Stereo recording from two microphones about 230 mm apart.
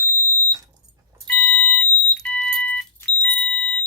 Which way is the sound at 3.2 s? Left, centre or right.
Centre.